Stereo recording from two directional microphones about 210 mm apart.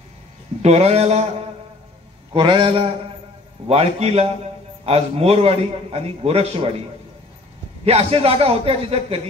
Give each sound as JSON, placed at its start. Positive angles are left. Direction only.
{"t": 0.6, "sound": "a man's voice", "side_deg": -30}
{"t": 2.3, "sound": "a man's voice", "side_deg": -25}
{"t": 7.8, "sound": "a man's voice", "side_deg": -30}